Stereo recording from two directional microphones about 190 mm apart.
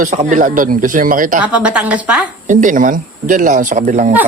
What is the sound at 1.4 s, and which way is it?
Speech, 5° right (ahead or behind).